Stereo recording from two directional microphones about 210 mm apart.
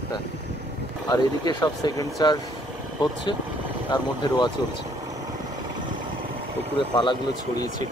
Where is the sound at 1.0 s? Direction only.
20° left (ahead or behind).